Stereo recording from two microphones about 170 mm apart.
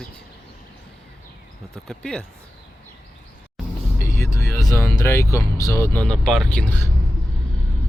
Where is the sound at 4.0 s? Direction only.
15° left (ahead or behind).